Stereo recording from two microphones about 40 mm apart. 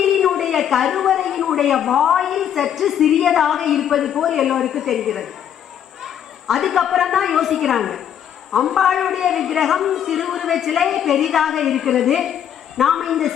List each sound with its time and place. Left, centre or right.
0.0 s a woman's voice: centre
6.5 s a man's voice: centre